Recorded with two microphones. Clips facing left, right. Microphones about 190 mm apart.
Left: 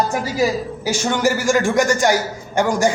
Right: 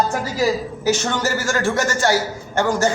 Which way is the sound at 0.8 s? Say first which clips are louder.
Left 2 dB; 10° left (ahead or behind).